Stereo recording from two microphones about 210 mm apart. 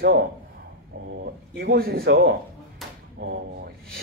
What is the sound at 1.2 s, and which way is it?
Speech, 50° right (ahead or behind).